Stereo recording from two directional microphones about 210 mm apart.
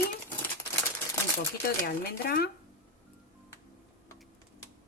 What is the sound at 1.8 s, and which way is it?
Speech, 45° left (ahead or behind).